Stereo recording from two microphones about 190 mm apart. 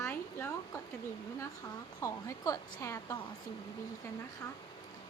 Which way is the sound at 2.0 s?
15° left (ahead or behind).